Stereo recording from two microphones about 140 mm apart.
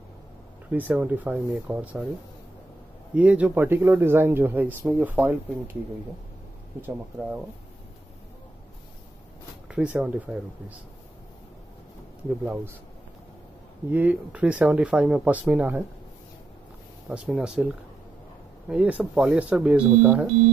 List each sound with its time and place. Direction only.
0.7 s speech: 10° right (ahead or behind)
3.2 s speech: 10° right (ahead or behind)
9.7 s speech: 10° right (ahead or behind)
13.8 s speech: 10° right (ahead or behind)
17.1 s speech: 5° right (ahead or behind)